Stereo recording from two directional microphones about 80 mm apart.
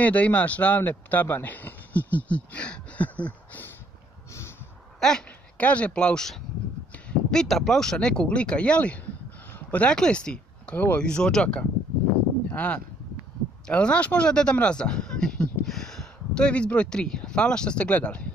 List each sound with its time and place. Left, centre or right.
0.0 s a man's voice: centre
5.0 s speech: centre